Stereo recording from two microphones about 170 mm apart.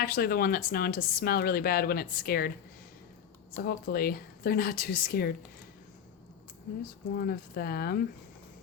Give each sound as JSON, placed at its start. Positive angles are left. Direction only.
{"t": 0.0, "sound": "speech", "side_deg": 60}
{"t": 3.6, "sound": "speech", "side_deg": 65}
{"t": 7.2, "sound": "speech", "side_deg": 65}